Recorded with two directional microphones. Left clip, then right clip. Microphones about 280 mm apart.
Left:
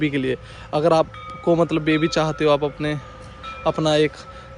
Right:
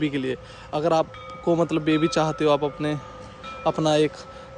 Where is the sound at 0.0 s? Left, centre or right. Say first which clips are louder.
Left 4 dB; centre.